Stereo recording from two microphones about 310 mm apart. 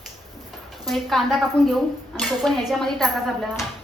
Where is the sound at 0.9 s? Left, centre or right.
Centre.